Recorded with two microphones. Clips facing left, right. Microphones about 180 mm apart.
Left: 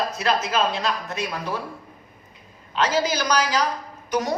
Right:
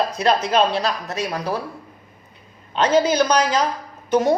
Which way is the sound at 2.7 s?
30° right (ahead or behind).